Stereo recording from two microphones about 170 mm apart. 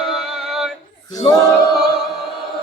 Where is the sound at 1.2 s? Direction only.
30° left (ahead or behind).